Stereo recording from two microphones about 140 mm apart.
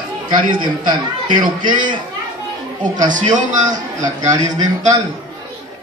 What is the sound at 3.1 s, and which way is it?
Speech, 65° right (ahead or behind).